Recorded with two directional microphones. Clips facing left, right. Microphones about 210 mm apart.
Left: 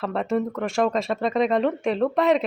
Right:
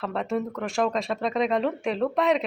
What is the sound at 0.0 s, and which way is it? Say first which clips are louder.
A woman's voice: left 3 dB; centre (ahead or behind).